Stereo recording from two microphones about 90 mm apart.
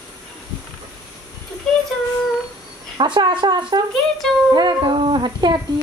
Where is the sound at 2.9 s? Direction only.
60° right (ahead or behind).